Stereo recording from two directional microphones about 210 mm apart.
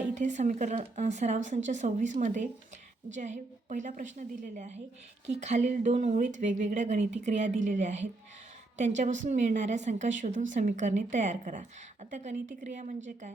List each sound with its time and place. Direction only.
0.1 s a woman's voice: 35° right (ahead or behind)